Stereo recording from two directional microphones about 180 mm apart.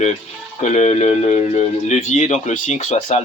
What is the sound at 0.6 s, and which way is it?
Speech, 40° left (ahead or behind).